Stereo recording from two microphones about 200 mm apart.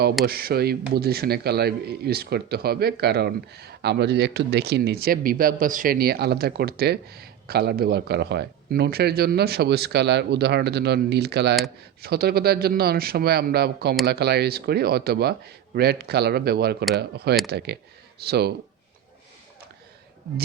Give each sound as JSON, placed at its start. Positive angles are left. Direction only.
{"t": 0.3, "sound": "a man's voice", "side_deg": -50}